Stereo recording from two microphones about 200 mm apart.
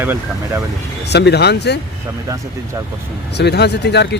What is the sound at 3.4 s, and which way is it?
Speech, 55° left (ahead or behind).